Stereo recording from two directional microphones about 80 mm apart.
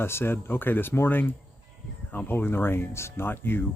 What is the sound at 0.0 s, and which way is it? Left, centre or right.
Speech, left.